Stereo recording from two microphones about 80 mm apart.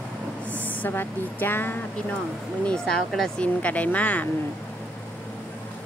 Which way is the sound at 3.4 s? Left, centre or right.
Centre.